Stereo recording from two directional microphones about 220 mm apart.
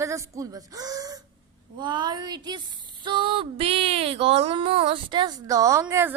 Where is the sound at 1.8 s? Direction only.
20° right (ahead or behind).